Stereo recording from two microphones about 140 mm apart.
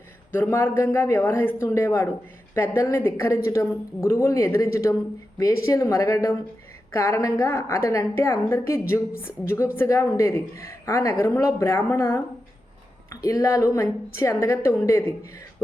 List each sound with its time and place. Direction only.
0.3 s a woman's voice: 15° left (ahead or behind)